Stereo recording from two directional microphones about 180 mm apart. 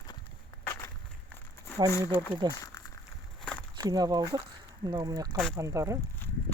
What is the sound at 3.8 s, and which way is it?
Speech, 20° right (ahead or behind).